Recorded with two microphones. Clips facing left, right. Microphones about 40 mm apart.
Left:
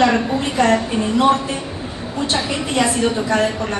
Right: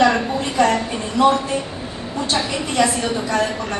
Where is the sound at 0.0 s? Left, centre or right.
Left.